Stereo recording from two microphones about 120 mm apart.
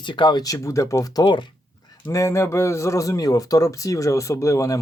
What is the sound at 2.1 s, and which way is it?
A man's voice, 25° left (ahead or behind).